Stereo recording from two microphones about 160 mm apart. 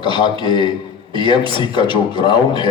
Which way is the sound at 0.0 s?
30° left (ahead or behind).